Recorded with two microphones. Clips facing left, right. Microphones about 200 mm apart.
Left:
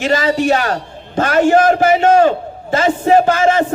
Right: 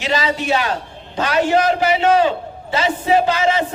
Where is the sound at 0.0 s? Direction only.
50° left (ahead or behind).